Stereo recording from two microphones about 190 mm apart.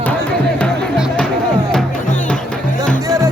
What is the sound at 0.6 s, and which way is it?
Music, 5° left (ahead or behind).